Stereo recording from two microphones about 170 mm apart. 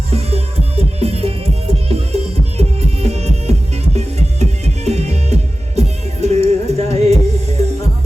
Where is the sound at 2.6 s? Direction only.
40° right (ahead or behind).